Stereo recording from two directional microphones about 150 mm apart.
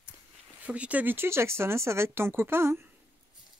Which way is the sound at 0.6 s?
10° right (ahead or behind).